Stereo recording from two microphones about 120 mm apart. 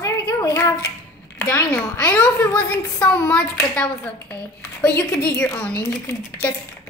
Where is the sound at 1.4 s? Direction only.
10° left (ahead or behind).